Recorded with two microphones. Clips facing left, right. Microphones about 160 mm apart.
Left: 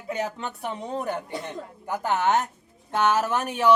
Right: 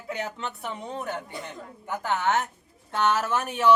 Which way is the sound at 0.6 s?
15° left (ahead or behind).